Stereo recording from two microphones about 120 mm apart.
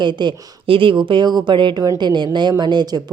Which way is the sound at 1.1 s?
35° right (ahead or behind).